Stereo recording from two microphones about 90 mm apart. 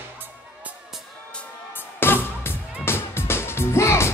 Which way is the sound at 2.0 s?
25° left (ahead or behind).